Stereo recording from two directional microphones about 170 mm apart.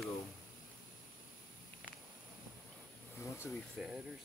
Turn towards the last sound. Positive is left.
turn(degrees=0)  # may be behind; listen again after turning